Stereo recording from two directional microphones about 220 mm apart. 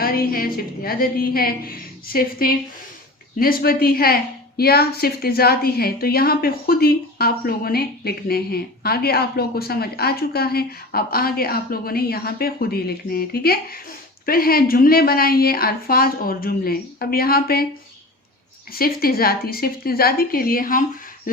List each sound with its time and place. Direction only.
0.0 s a woman's voice: 40° left (ahead or behind)
18.7 s a woman's voice: 45° left (ahead or behind)